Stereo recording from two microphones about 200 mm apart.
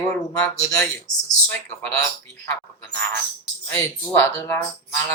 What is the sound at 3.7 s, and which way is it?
Speech, 10° left (ahead or behind).